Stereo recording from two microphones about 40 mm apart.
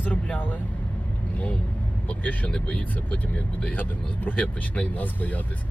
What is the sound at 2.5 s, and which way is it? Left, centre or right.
Speech, left.